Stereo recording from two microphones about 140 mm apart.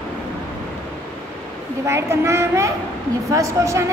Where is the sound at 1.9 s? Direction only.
20° right (ahead or behind).